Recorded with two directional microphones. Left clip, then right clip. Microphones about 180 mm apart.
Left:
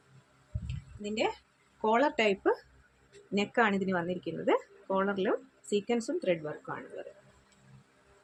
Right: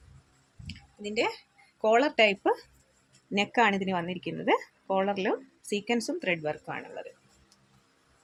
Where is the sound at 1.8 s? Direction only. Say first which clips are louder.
Right 4 dB; 50° right (ahead or behind).